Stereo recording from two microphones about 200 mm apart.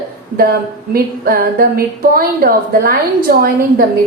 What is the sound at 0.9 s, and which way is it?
A woman's voice, 50° right (ahead or behind).